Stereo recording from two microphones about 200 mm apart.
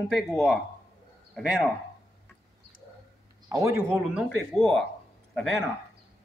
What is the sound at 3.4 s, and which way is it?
Speech, 15° right (ahead or behind).